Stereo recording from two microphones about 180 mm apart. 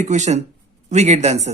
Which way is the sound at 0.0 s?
40° right (ahead or behind).